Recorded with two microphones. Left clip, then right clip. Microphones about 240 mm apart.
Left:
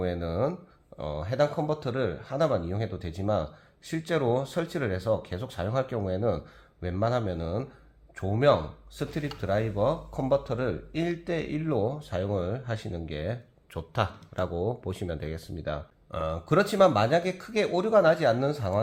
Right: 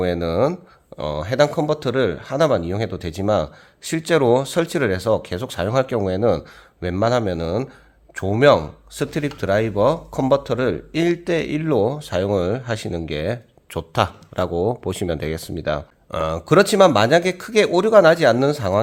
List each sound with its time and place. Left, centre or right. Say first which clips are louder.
0.0 s speech: right 10 dB; right